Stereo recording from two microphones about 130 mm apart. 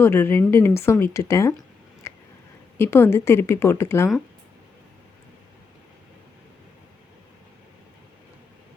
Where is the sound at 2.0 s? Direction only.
25° left (ahead or behind).